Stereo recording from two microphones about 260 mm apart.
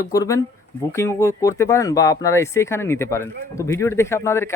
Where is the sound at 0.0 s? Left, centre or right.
Centre.